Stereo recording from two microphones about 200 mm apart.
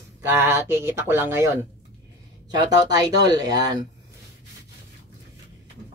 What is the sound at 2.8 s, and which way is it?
Speech, 20° right (ahead or behind).